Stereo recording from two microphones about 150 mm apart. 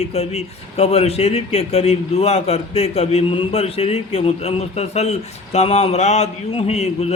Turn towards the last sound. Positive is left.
turn(degrees=45)  # may be behind; listen again after turning